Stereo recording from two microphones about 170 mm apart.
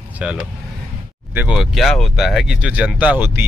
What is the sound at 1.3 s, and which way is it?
Speech, 10° right (ahead or behind).